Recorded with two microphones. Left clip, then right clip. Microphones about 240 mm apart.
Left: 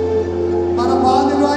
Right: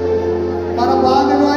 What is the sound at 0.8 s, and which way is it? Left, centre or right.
Music, left.